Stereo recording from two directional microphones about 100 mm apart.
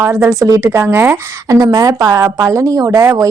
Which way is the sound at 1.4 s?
40° right (ahead or behind).